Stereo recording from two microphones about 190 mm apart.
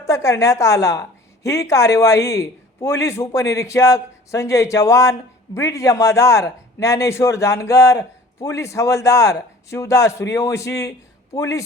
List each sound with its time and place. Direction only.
0.0 s a man's voice: 15° left (ahead or behind)